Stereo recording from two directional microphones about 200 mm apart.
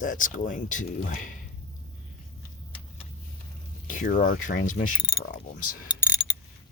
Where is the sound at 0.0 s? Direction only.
40° left (ahead or behind).